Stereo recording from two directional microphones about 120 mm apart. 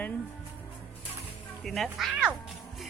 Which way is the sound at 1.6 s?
Centre (ahead or behind).